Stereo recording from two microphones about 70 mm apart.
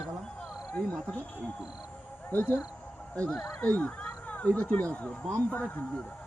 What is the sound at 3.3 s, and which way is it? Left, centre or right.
Speech, centre.